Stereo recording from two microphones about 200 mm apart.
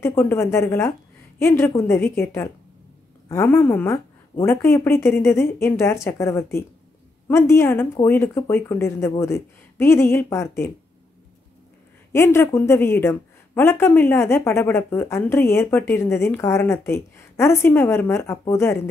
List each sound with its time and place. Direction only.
0.0 s speech: 10° left (ahead or behind)
12.1 s speech: 10° left (ahead or behind)